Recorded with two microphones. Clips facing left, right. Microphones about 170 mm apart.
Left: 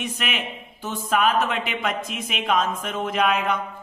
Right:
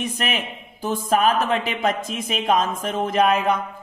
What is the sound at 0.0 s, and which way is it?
Speech, 40° right (ahead or behind).